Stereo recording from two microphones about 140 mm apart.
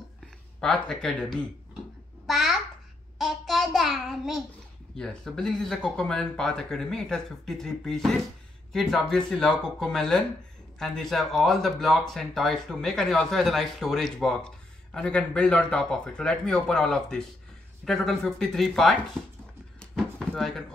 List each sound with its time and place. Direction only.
0.6 s speech: 5° left (ahead or behind)
2.2 s babbling: centre (ahead or behind)
3.2 s child singing: centre (ahead or behind)
4.9 s speech: 5° left (ahead or behind)
19.8 s a sound: 5° left (ahead or behind)